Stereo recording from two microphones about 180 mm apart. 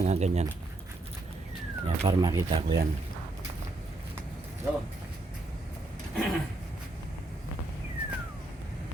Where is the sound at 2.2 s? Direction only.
25° right (ahead or behind).